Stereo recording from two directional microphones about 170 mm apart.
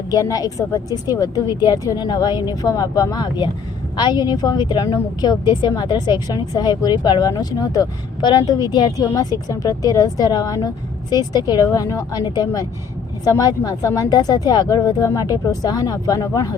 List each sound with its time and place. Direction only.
0.1 s a woman's voice: 20° left (ahead or behind)